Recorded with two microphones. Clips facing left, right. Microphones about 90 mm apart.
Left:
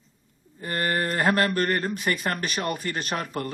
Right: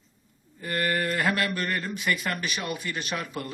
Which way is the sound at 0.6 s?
35° left (ahead or behind).